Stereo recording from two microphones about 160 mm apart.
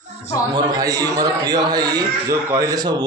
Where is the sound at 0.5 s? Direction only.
25° right (ahead or behind).